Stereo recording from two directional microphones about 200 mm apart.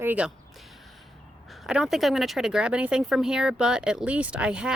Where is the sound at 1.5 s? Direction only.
Centre (ahead or behind).